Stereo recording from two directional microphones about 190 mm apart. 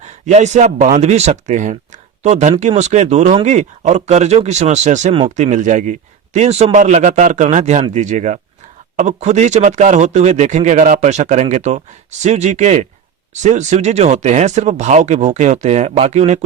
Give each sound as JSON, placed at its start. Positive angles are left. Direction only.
{"t": 0.0, "sound": "speech", "side_deg": -40}